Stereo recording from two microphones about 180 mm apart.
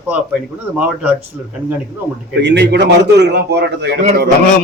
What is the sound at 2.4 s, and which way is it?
A man's voice, 70° right (ahead or behind).